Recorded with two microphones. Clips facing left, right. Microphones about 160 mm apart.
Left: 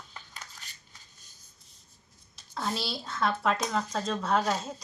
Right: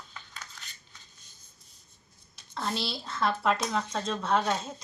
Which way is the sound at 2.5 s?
Centre (ahead or behind).